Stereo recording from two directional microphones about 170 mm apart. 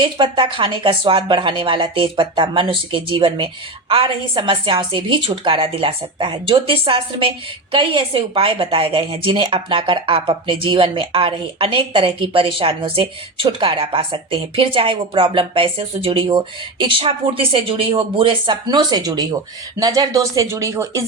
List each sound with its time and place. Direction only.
0.0 s speech: 30° right (ahead or behind)